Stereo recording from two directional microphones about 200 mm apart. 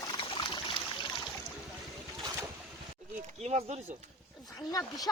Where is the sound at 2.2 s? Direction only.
15° right (ahead or behind).